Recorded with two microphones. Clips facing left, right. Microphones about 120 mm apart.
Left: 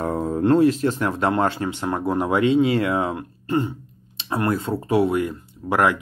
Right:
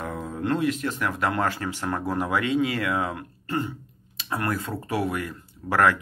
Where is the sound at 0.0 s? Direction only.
35° left (ahead or behind).